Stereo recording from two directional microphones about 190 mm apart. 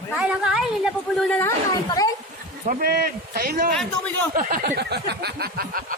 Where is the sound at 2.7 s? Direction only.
55° right (ahead or behind).